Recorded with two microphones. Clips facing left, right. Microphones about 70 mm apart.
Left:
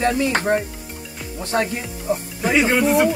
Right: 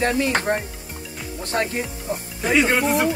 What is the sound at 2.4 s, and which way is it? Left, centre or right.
Speech, centre.